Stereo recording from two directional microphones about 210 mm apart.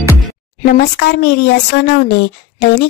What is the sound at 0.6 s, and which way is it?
Speech, 45° left (ahead or behind).